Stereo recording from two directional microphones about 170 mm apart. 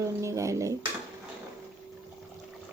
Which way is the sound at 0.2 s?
15° right (ahead or behind).